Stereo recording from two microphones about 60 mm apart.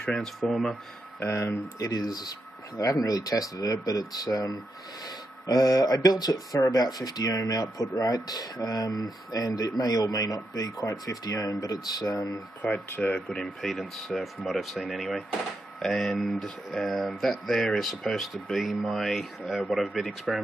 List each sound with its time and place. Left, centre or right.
0.0 s speech: centre
1.4 s speech: left
1.9 s speech: left
12.6 s speech: left; by 20.4 s centre